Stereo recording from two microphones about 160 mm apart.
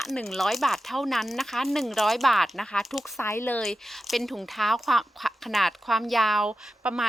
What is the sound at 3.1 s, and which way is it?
Speech, 15° left (ahead or behind).